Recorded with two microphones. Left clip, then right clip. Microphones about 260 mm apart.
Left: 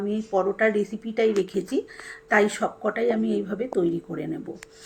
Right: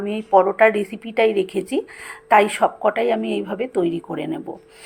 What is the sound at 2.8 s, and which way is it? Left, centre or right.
Speech, right.